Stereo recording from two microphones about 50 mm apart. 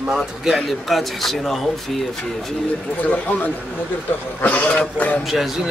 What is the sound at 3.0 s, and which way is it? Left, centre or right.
A man's voice, left.